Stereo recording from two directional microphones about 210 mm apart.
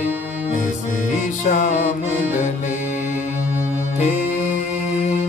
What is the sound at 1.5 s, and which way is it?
Music, 35° left (ahead or behind).